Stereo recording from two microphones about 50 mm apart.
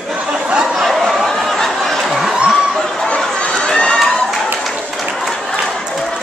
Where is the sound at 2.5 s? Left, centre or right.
Centre.